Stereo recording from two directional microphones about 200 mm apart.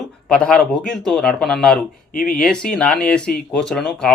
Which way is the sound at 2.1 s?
45° left (ahead or behind).